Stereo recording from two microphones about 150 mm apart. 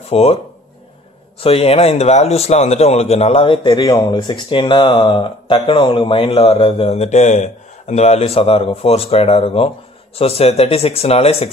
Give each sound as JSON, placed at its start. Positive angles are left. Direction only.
{"t": 0.1, "sound": "speech", "side_deg": 45}
{"t": 1.4, "sound": "a man's voice", "side_deg": 40}